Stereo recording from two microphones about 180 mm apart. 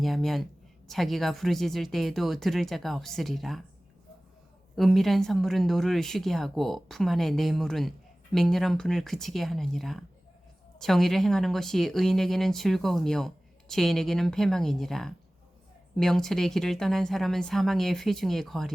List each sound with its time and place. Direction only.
0.0 s speech: centre (ahead or behind)
4.7 s speech: centre (ahead or behind)